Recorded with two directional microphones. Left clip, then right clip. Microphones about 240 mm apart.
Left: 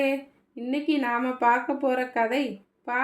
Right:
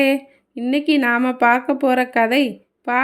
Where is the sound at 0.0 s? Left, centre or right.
Right.